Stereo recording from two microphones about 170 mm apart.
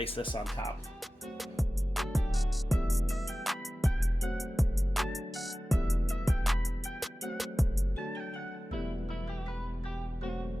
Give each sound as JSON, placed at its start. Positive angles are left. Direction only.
{"t": 0.0, "sound": "speech", "side_deg": 30}
{"t": 1.4, "sound": "music", "side_deg": 0}